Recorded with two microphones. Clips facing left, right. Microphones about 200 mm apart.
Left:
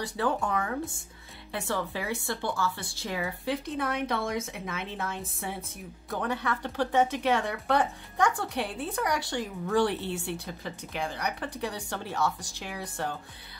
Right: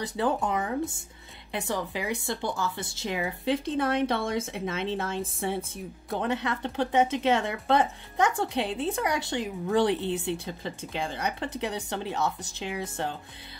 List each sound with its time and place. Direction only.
0.0 s a woman's voice: 20° right (ahead or behind)